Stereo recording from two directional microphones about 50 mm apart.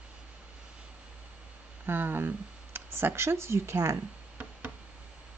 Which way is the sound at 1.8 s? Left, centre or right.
Right.